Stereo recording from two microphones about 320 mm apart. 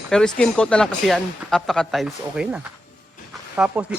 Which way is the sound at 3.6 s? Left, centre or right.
Centre.